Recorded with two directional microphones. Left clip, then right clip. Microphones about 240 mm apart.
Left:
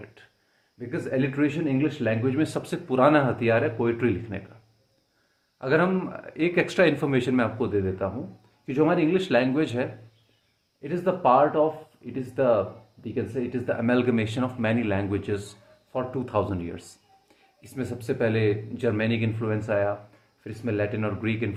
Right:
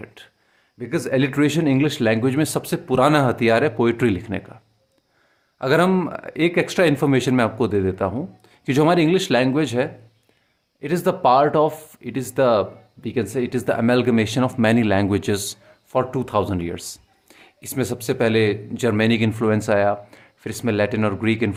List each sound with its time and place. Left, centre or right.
0.0 s speech: right
5.5 s speech: right
10.8 s speech: right